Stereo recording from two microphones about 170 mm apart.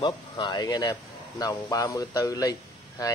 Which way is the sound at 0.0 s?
30° left (ahead or behind).